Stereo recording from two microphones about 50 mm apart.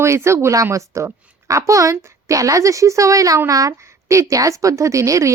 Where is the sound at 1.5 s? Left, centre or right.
Right.